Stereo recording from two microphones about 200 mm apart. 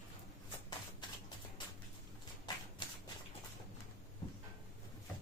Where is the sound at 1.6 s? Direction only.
20° left (ahead or behind).